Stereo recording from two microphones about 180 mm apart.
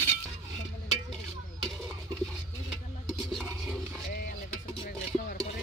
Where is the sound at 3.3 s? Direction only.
Centre (ahead or behind).